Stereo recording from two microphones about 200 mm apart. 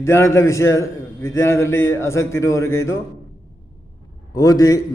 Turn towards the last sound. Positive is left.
turn(degrees=20)  # may be behind; listen again after turning